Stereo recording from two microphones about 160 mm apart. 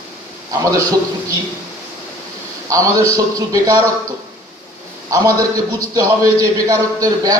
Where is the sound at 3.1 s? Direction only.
20° right (ahead or behind).